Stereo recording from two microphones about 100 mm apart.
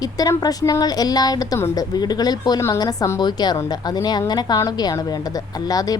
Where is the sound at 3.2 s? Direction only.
45° left (ahead or behind).